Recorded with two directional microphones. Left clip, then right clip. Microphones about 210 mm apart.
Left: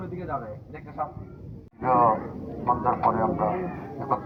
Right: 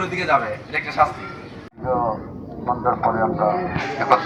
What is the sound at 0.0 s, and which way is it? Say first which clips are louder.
Speech: right 14 dB; 40° right (ahead or behind).